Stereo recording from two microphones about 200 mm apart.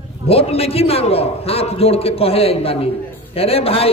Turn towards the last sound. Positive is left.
turn(degrees=30)  # may be behind; listen again after turning